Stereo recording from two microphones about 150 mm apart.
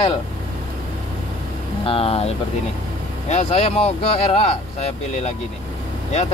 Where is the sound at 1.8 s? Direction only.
40° left (ahead or behind).